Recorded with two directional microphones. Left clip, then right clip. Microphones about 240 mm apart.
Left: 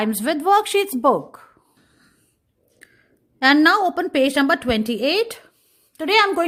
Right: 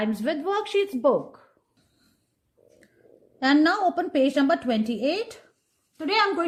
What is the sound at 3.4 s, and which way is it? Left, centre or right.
A woman's voice, left.